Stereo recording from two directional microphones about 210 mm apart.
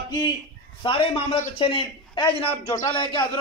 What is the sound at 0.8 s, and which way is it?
A man's voice, 25° left (ahead or behind).